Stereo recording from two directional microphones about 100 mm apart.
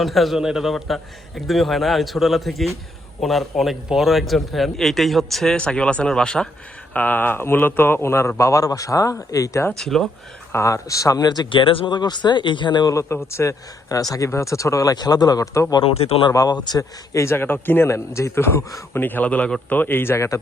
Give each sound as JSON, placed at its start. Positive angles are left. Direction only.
{"t": 0.0, "sound": "a man's voice", "side_deg": 0}
{"t": 9.7, "sound": "a man's voice", "side_deg": 5}
{"t": 10.5, "sound": "speech", "side_deg": 30}
{"t": 11.4, "sound": "speech", "side_deg": 60}
{"t": 11.9, "sound": "speech", "side_deg": 45}
{"t": 12.9, "sound": "speech", "side_deg": 30}
{"t": 15.8, "sound": "speech", "side_deg": 75}
{"t": 16.3, "sound": "speech", "side_deg": 35}
{"t": 17.2, "sound": "a man's voice", "side_deg": 25}